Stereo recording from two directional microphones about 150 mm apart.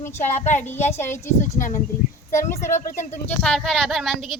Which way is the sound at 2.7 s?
50° left (ahead or behind).